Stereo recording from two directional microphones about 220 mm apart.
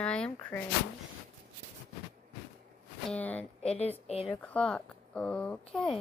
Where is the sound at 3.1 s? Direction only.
5° left (ahead or behind).